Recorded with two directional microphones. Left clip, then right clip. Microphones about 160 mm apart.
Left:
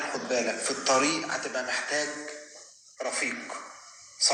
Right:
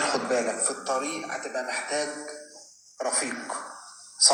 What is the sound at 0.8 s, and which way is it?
Speech, 40° left (ahead or behind).